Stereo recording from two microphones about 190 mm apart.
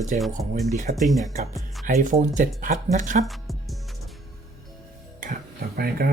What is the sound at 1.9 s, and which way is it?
Speech, 40° right (ahead or behind).